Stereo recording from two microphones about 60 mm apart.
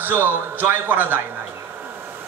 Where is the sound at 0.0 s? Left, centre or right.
Right.